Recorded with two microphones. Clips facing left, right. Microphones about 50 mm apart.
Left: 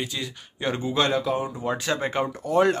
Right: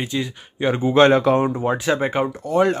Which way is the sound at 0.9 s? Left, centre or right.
Right.